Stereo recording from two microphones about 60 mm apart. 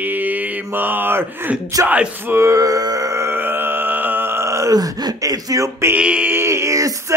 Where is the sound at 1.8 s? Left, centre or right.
Right.